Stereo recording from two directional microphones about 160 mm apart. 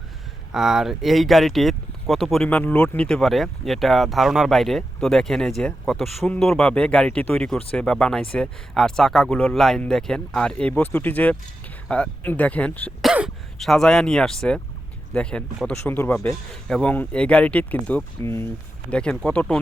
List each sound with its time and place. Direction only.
0.5 s speech: 5° right (ahead or behind)
13.0 s speech: 5° right (ahead or behind)